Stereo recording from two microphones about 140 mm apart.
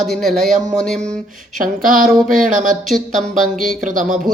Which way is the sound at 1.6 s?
80° right.